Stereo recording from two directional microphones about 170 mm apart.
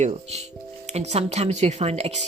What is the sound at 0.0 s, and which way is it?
Speech, 40° right (ahead or behind).